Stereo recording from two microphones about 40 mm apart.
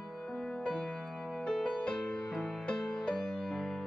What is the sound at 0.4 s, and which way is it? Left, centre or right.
Music, centre.